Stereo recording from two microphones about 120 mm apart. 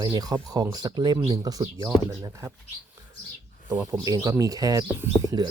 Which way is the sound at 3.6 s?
25° right (ahead or behind).